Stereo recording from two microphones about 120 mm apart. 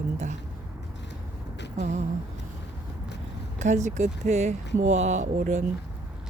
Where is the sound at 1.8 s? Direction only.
75° right (ahead or behind).